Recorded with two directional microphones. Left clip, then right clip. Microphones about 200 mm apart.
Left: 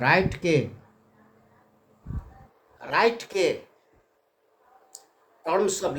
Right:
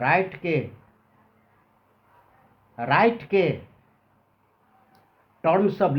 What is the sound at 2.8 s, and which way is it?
Speech, 50° left (ahead or behind).